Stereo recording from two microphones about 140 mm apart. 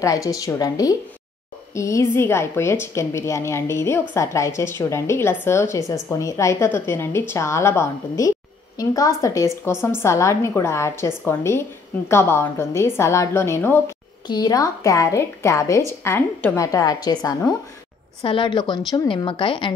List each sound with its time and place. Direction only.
0.0 s a woman's voice: 25° left (ahead or behind)
14.2 s a woman's voice: 30° left (ahead or behind)
16.6 s a woman's voice: 25° left (ahead or behind)